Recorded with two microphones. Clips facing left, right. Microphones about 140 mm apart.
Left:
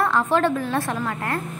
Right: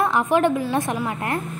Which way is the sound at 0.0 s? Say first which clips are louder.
Right 1 dB; 15° right (ahead or behind).